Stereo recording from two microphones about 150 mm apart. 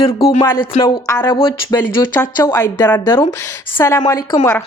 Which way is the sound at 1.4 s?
35° left (ahead or behind).